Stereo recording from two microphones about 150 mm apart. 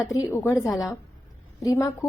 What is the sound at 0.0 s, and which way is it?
A woman's voice, 20° left (ahead or behind).